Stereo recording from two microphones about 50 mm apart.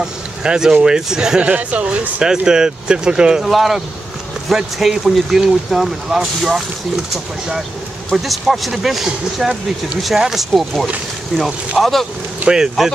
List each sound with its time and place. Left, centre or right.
0.0 s speech: centre
1.4 s speech: right
2.2 s speech: centre
3.4 s speech: centre
5.7 s speech: centre
6.0 s speech: centre
8.1 s speech: centre
12.4 s speech: centre